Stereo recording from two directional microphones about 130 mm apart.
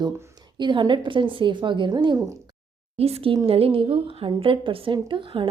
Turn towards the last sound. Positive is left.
turn(degrees=-40)  # may be behind; listen again after turning